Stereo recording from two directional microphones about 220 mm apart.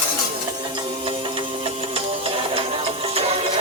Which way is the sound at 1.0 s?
25° right (ahead or behind).